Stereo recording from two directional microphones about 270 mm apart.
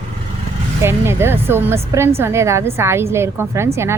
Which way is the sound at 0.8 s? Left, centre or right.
Centre.